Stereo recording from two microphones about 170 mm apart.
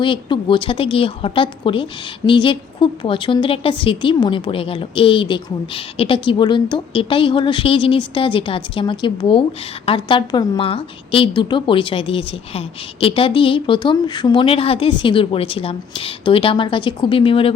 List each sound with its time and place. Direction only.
0.0 s a woman's voice: 30° left (ahead or behind)